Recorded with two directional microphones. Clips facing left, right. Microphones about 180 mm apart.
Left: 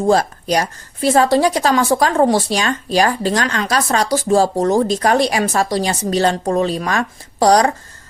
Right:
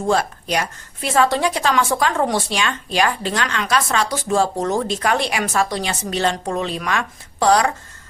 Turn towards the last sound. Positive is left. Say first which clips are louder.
# left 4 dB
turn(degrees=35)  # may be behind; listen again after turning